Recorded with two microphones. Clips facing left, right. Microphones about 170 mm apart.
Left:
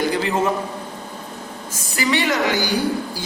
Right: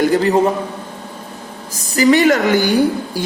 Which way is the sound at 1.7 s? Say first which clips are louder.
Right 9 dB; 40° right (ahead or behind).